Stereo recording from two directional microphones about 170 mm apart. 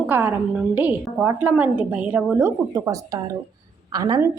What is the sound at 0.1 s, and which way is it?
A woman's voice, 10° right (ahead or behind).